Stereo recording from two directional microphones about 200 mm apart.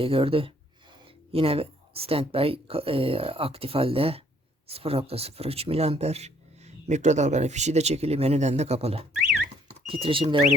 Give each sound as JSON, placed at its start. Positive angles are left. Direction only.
{"t": 0.0, "sound": "speech", "side_deg": -25}